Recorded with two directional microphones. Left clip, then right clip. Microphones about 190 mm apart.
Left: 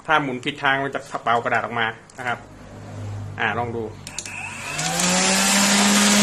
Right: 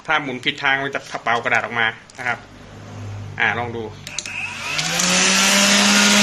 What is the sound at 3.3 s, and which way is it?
Speech, 20° left (ahead or behind).